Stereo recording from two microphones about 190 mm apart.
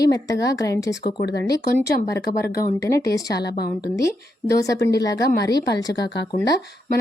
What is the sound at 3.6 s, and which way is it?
Speech, 55° left (ahead or behind).